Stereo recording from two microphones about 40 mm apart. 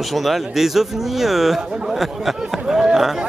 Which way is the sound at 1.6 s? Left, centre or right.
Centre.